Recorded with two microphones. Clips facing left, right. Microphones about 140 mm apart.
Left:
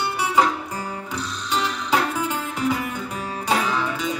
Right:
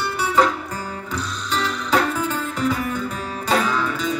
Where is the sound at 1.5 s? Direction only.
15° left (ahead or behind).